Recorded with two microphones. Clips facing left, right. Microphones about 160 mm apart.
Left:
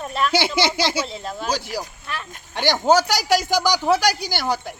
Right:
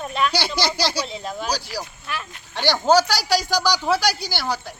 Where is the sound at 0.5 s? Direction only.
20° left (ahead or behind).